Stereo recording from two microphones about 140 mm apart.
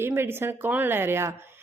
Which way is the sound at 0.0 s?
15° right (ahead or behind).